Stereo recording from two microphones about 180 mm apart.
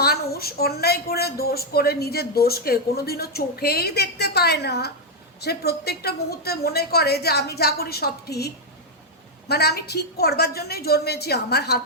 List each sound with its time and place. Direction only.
0.0 s speech: 60° left (ahead or behind)